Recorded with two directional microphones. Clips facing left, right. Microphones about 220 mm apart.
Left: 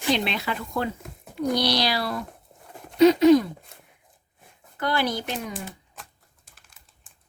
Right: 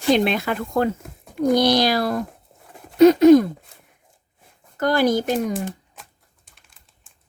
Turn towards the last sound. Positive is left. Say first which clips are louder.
# even
turn(degrees=0)  # may be behind; listen again after turning